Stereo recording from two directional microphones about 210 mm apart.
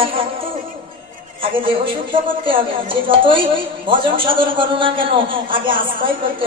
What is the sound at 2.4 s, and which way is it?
A man's voice, 25° right (ahead or behind).